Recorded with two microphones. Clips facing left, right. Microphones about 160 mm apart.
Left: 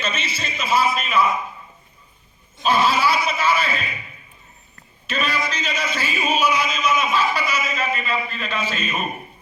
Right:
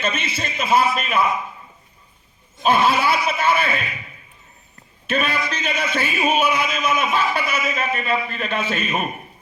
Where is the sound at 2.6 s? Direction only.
55° right (ahead or behind).